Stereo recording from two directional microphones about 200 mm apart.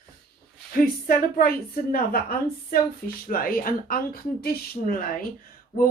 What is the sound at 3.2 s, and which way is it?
A woman's voice, 45° left (ahead or behind).